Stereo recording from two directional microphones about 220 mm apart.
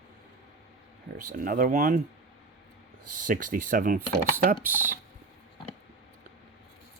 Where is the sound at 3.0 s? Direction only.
90° right.